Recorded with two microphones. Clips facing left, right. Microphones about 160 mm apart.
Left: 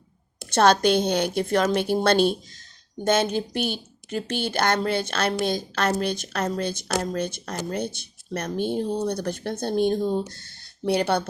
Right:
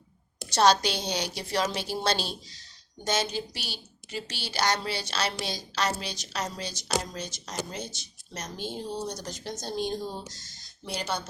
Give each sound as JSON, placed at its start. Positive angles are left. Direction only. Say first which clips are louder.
{"t": 0.5, "sound": "a woman's voice", "louder": "left 5 dB", "side_deg": 55}